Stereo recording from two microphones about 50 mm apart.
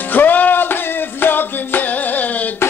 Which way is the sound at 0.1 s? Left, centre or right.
Left.